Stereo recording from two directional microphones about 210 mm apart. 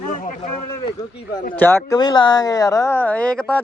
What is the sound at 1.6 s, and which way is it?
Speech, 10° left (ahead or behind).